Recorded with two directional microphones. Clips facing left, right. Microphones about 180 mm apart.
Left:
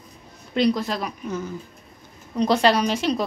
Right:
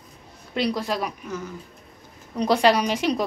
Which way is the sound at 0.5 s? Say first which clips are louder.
Left 3 dB; 10° right (ahead or behind).